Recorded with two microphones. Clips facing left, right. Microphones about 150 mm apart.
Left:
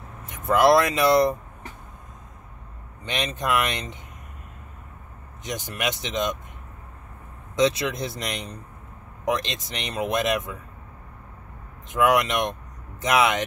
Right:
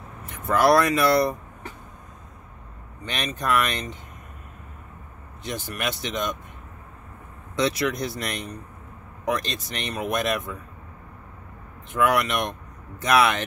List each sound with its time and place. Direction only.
0.3 s speech: 20° left (ahead or behind)
3.1 s speech: 20° left (ahead or behind)
5.4 s speech: 15° left (ahead or behind)
7.5 s speech: 20° left (ahead or behind)
11.9 s speech: 20° left (ahead or behind)